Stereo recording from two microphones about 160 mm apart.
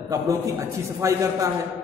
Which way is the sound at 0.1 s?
20° right (ahead or behind).